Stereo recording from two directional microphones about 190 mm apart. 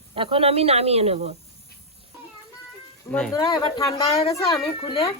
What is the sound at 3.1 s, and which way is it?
Speech, 5° left (ahead or behind).